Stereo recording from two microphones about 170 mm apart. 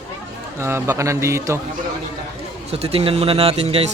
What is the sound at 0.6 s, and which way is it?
Speech, 15° right (ahead or behind).